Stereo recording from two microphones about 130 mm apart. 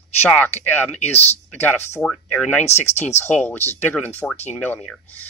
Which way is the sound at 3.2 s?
15° left (ahead or behind).